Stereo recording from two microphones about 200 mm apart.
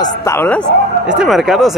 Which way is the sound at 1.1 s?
5° right (ahead or behind).